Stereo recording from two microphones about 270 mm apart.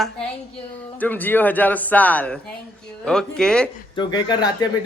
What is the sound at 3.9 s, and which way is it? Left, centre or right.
Speech, centre.